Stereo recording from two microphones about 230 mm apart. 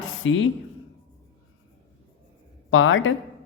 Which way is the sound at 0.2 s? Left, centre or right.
Left.